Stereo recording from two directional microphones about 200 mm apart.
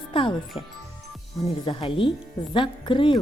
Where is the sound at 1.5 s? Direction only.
25° left (ahead or behind).